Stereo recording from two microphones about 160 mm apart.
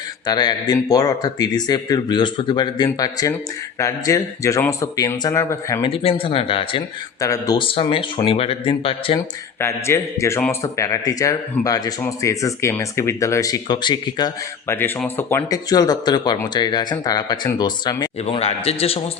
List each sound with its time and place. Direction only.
0.3 s speech: 25° left (ahead or behind)
5.9 s speech: 35° left (ahead or behind)
7.2 s speech: 20° left (ahead or behind)
9.1 s speech: 15° left (ahead or behind)
14.8 s speech: 15° left (ahead or behind)
18.2 s speech: 40° left (ahead or behind)